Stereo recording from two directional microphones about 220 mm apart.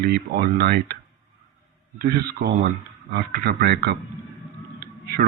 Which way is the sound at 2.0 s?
45° right (ahead or behind).